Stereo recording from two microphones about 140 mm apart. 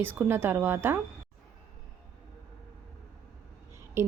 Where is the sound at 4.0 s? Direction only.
20° right (ahead or behind).